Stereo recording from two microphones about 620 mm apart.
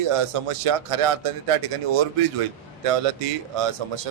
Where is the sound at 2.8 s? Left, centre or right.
Right.